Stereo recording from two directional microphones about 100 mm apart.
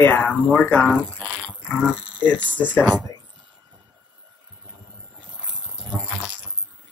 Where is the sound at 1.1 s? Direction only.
10° left (ahead or behind).